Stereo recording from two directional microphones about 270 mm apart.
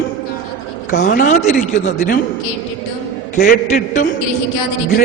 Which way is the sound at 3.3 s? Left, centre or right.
Left.